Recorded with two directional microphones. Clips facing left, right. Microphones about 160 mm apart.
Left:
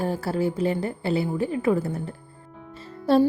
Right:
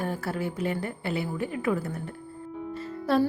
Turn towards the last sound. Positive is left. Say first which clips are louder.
# left 5 dB
turn(degrees=30)  # may be behind; listen again after turning